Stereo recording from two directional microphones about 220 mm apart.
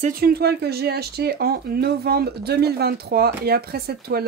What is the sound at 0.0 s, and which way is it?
Speech, 40° right (ahead or behind).